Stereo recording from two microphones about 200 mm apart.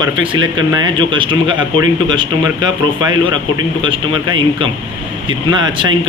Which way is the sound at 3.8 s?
25° right (ahead or behind).